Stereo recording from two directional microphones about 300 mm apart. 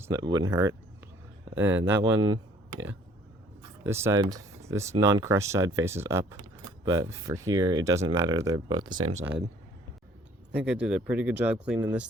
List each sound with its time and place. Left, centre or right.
0.0 s speech: centre
2.2 s a sound: right
3.8 s speech: centre
6.4 s mechanisms: centre
7.6 s speech: centre
10.5 s speech: centre